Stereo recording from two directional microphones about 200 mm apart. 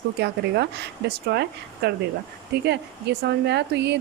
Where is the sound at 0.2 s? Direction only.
55° right (ahead or behind).